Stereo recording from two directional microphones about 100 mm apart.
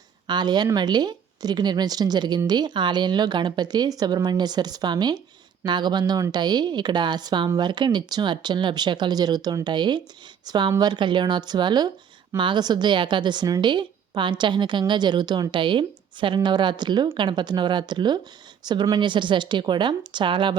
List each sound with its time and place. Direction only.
0.3 s a woman's voice: 45° right (ahead or behind)